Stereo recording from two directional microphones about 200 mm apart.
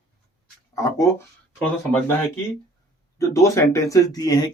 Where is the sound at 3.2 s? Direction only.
15° left (ahead or behind).